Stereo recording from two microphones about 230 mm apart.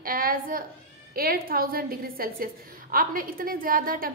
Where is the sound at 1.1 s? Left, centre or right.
Right.